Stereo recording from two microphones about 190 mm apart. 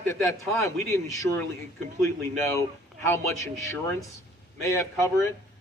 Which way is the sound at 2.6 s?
15° left (ahead or behind).